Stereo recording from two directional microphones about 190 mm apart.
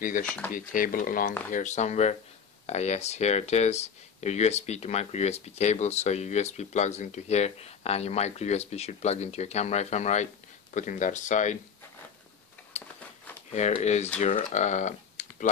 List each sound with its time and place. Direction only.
0.0 s speech: 45° left (ahead or behind)
12.7 s a sound: 35° left (ahead or behind)
13.5 s speech: 35° left (ahead or behind)